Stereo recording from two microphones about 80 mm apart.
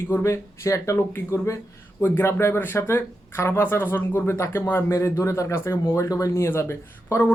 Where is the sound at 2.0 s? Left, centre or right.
Left.